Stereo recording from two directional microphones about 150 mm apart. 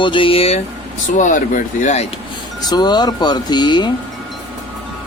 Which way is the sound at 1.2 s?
60° left (ahead or behind).